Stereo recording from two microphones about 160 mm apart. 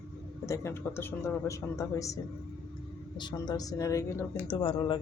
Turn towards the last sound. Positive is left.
turn(degrees=30)  # may be behind; listen again after turning